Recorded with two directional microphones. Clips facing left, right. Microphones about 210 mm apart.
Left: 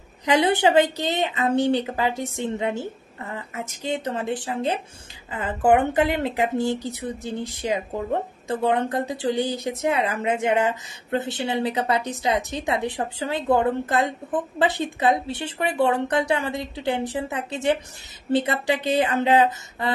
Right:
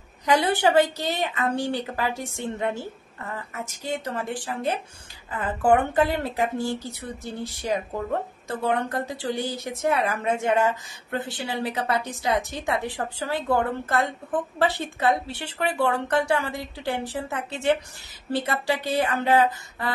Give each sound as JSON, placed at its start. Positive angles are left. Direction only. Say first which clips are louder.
{"t": 0.2, "sound": "speech", "louder": "left 2 dB", "side_deg": 20}